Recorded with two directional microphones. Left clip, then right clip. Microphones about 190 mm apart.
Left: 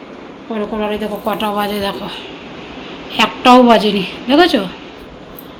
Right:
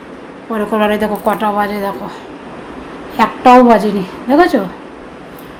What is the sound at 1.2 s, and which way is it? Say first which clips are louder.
Speech: right 1 dB; 10° right (ahead or behind).